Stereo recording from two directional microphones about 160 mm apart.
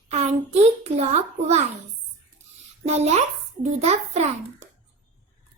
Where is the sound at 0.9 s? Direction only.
45° right (ahead or behind).